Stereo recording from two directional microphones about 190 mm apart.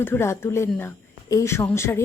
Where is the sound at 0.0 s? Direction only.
10° left (ahead or behind).